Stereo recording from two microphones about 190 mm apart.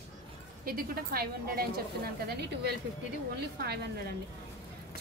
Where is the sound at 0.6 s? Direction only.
50° right (ahead or behind).